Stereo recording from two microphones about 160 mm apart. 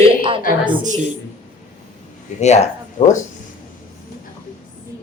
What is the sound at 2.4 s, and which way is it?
Speech, 45° left (ahead or behind).